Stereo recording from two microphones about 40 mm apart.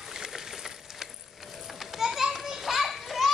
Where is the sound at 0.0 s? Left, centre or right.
Centre.